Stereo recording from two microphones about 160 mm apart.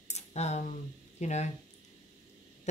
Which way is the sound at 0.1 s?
45° left (ahead or behind).